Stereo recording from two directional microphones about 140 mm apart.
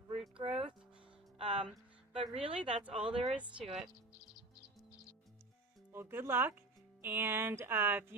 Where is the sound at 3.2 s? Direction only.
10° right (ahead or behind).